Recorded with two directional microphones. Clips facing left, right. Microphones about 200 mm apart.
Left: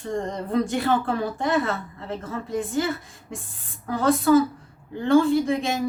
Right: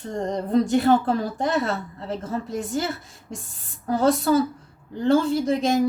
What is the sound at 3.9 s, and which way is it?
A woman's voice, 40° right (ahead or behind).